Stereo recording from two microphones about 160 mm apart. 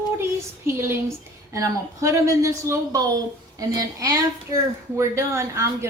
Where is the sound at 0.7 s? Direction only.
15° right (ahead or behind).